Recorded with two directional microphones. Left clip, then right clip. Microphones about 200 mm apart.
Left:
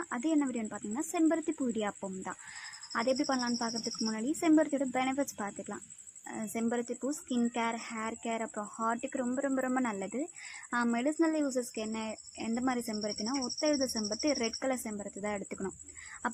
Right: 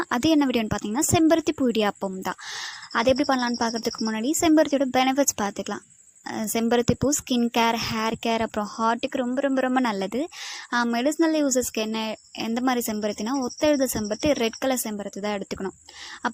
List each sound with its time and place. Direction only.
0.0 s a woman's voice: 40° right (ahead or behind)